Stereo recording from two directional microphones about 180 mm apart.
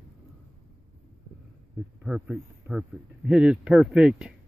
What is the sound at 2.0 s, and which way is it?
Speech, centre (ahead or behind).